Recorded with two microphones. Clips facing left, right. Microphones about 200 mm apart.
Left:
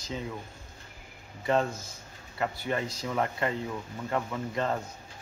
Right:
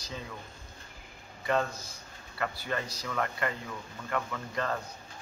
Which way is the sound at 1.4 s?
25° left (ahead or behind).